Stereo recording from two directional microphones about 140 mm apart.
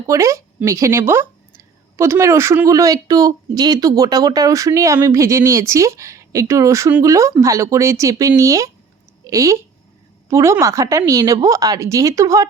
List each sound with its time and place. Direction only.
0.1 s speech: 20° right (ahead or behind)